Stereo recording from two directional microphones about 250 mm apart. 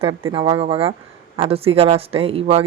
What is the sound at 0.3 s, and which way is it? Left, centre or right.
Speech, right.